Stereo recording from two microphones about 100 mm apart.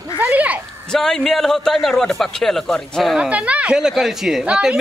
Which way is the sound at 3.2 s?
15° right (ahead or behind).